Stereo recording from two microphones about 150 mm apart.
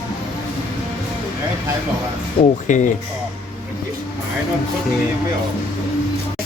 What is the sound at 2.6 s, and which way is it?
Speech, 55° left (ahead or behind).